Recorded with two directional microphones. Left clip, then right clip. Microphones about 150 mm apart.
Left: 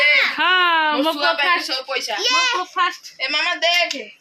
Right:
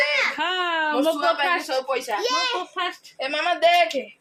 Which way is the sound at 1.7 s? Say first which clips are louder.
Left 1 dB; 85° right.